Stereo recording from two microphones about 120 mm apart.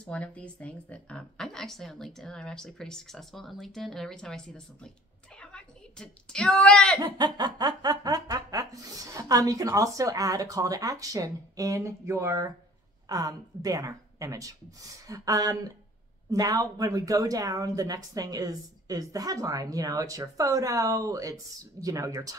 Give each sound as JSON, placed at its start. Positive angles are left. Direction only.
{"t": 0.0, "sound": "speech", "side_deg": 10}
{"t": 5.4, "sound": "a sound", "side_deg": 5}
{"t": 7.2, "sound": "speech", "side_deg": -35}